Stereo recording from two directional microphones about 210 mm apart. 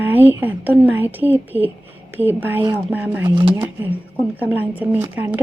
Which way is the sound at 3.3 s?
20° right (ahead or behind).